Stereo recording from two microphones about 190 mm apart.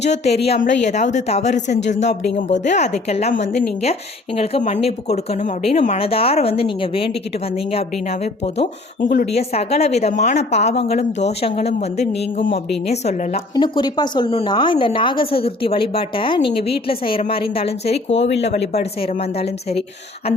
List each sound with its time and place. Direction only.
0.0 s speech: 35° left (ahead or behind)
9.0 s speech: 45° left (ahead or behind)
9.3 s speech: 35° left (ahead or behind)
13.5 s a woman's voice: 25° left (ahead or behind)
18.1 s speech: 70° left (ahead or behind)
18.4 s speech: 35° left (ahead or behind)